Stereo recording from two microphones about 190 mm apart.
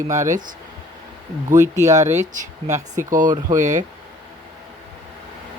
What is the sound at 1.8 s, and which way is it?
Speech, 15° right (ahead or behind).